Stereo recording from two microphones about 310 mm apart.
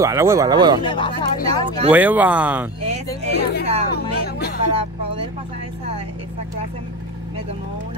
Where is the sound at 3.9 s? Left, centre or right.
Left.